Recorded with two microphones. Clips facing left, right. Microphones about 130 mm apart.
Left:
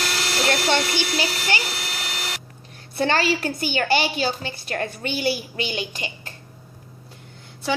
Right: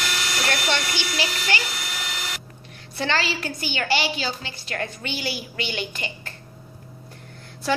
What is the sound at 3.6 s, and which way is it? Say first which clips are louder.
A child's voice: left 3 dB; 45° left (ahead or behind).